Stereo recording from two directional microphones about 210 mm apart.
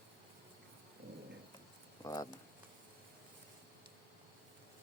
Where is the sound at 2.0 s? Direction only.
15° left (ahead or behind).